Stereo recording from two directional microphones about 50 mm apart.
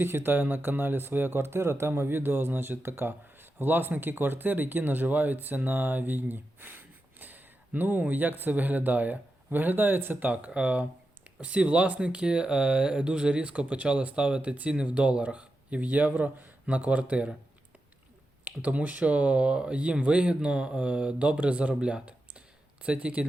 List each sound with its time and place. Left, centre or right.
0.0 s speech: right
18.4 s speech: right